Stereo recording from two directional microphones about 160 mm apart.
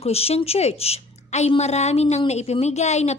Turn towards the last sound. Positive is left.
turn(degrees=45)  # may be behind; listen again after turning